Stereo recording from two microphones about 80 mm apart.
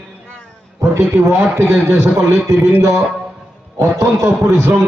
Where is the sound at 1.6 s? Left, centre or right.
Right.